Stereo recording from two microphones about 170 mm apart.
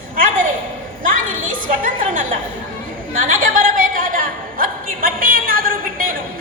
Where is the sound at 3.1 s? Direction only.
55° right (ahead or behind).